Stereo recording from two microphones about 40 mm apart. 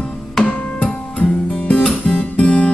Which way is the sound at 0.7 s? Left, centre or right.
Left.